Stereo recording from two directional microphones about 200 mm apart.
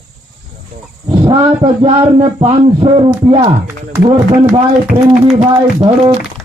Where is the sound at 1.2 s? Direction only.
25° right (ahead or behind).